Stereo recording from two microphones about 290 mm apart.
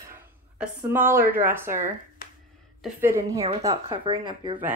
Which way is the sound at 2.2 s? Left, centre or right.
Left.